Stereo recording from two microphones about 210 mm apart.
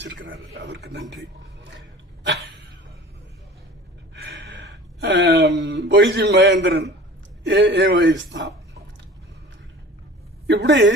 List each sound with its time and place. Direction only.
0.0 s a man's voice: 60° right (ahead or behind)
4.1 s a man's voice: 55° right (ahead or behind)
10.4 s a woman's voice: 60° right (ahead or behind)